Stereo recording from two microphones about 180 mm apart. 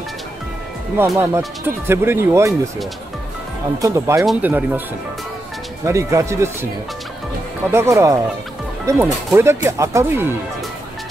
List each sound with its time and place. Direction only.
0.9 s speech: 15° right (ahead or behind)
3.8 s speech: 15° right (ahead or behind)
4.2 s speech: 5° right (ahead or behind)
5.9 s speech: 15° right (ahead or behind)
7.7 s speech: 15° right (ahead or behind)